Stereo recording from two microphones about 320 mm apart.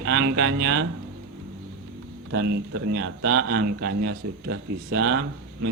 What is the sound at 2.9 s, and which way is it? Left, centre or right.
A man's voice, right.